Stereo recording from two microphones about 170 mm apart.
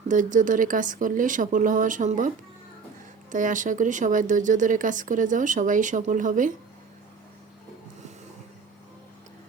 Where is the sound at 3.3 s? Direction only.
50° right (ahead or behind).